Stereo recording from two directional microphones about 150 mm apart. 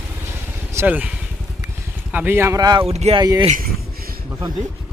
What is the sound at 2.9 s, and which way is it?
Speech, 45° right (ahead or behind).